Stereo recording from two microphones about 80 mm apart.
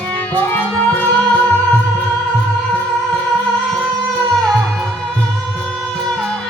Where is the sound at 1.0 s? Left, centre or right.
Centre.